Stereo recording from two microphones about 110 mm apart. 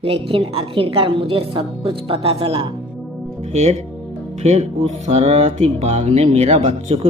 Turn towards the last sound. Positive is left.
turn(degrees=-70)  # may be behind; listen again after turning